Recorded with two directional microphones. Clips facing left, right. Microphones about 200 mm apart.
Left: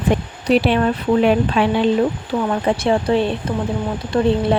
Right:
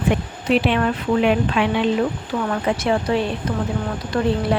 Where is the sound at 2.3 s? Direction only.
25° left (ahead or behind).